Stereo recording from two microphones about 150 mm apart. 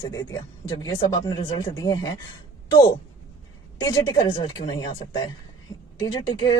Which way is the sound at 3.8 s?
25° left (ahead or behind).